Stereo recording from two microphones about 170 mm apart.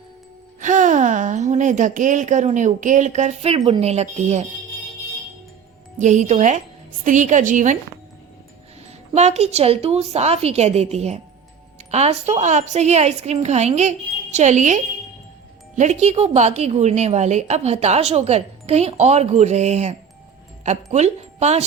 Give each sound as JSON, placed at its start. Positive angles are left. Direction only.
{"t": 0.6, "sound": "a woman's voice", "side_deg": -50}
{"t": 6.0, "sound": "a woman's voice", "side_deg": -45}
{"t": 9.1, "sound": "a woman's voice", "side_deg": -40}